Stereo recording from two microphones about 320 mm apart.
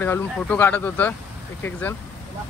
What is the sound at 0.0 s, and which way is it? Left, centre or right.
Speech, centre.